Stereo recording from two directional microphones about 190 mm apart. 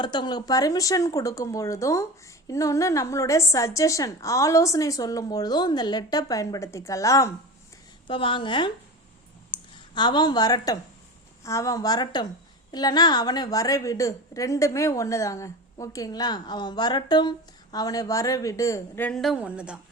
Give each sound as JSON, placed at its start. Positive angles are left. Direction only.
{"t": 0.0, "sound": "speech", "side_deg": 20}
{"t": 8.0, "sound": "a woman's voice", "side_deg": 25}
{"t": 9.7, "sound": "a woman's voice", "side_deg": 25}